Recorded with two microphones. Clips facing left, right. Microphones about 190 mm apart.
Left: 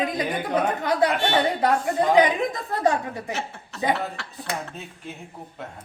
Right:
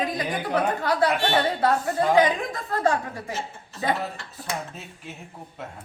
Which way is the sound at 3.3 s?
70° left (ahead or behind).